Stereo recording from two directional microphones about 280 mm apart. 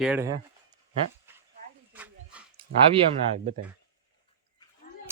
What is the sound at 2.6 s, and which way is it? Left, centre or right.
Speech, right.